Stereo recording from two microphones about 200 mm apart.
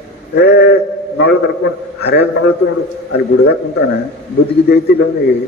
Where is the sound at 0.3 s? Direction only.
55° left (ahead or behind).